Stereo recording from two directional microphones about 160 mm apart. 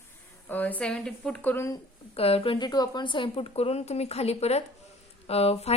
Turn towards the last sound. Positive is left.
turn(degrees=40)  # may be behind; listen again after turning